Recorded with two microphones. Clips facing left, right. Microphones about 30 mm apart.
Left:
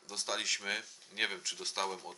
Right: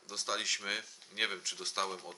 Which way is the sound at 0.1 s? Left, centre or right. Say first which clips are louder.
Even; centre.